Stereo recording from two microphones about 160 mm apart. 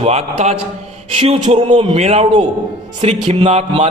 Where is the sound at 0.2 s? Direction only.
45° right (ahead or behind).